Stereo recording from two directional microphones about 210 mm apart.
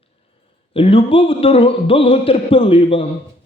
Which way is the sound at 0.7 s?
25° left (ahead or behind).